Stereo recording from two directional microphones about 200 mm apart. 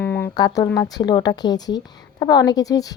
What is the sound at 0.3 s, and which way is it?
Speech, 20° left (ahead or behind).